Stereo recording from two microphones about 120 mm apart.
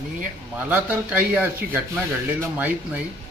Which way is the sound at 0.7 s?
15° right (ahead or behind).